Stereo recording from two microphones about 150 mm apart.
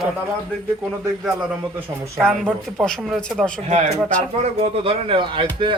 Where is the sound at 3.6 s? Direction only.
50° right (ahead or behind).